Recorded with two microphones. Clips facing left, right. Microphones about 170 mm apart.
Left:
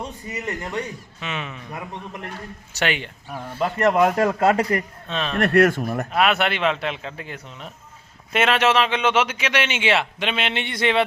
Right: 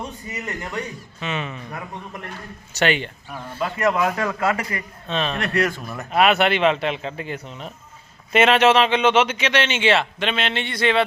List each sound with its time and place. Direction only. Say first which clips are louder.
0.3 s a man's voice: left 4 dB; 30° left (ahead or behind)
1.2 s speech: right 3 dB; centre (ahead or behind)
2.7 s speech: right 4 dB; 5° left (ahead or behind)
3.8 s speech: left 4 dB; 50° left (ahead or behind)
5.0 s speech: right 2 dB; centre (ahead or behind)
5.4 s speech: left 6 dB; 55° left (ahead or behind)
6.1 s a man's voice: right 5 dB; centre (ahead or behind); by 11.0 s 20° left (ahead or behind)